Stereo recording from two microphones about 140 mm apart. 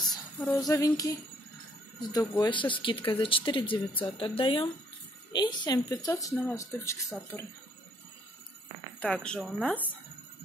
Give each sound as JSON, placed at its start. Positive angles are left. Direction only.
{"t": 0.6, "sound": "speech", "side_deg": 25}
{"t": 5.9, "sound": "speech", "side_deg": 25}
{"t": 9.0, "sound": "speech", "side_deg": 5}